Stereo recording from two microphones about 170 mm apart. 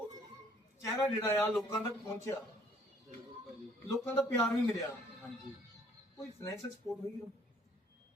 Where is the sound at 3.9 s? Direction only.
15° left (ahead or behind).